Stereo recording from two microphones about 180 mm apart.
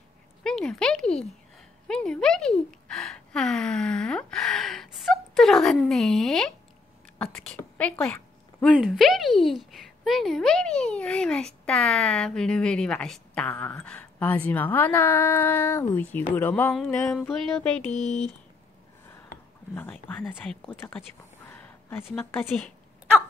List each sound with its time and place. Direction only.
0.4 s a child's voice: 5° left (ahead or behind)
17.9 s speech: 40° left (ahead or behind)
19.7 s speech: 10° left (ahead or behind)
21.5 s a sound: 15° left (ahead or behind)
22.0 s speech: 10° left (ahead or behind)